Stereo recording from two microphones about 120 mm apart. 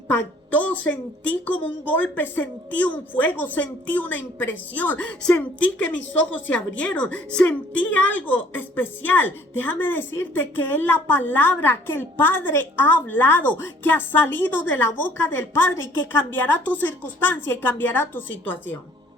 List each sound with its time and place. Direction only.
0.5 s a woman's voice: 15° left (ahead or behind)